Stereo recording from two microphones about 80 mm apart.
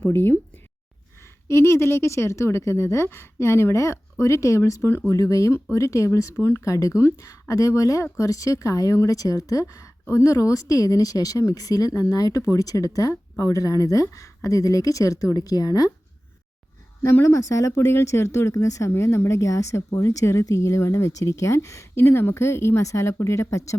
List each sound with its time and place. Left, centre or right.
0.0 s speech: left
1.5 s speech: left
17.0 s speech: left